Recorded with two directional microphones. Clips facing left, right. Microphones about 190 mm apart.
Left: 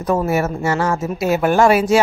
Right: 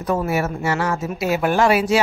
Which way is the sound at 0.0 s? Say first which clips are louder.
Left 3 dB; 45° left (ahead or behind).